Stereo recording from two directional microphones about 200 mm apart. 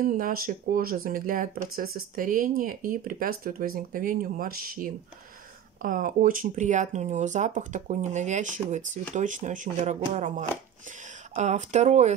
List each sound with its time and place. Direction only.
0.0 s speech: 45° right (ahead or behind)